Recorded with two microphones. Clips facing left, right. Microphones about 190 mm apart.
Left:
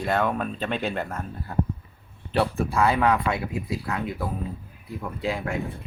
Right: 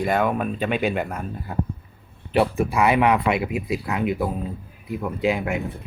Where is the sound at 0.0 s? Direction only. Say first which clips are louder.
Right 3 dB; 10° right (ahead or behind).